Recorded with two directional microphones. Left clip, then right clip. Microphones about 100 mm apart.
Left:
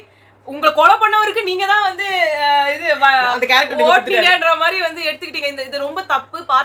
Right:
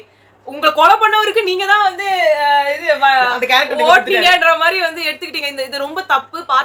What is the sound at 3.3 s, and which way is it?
Speech, 45° left (ahead or behind).